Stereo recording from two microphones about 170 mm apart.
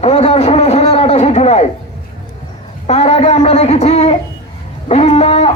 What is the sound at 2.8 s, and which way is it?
A man's voice, 40° left (ahead or behind).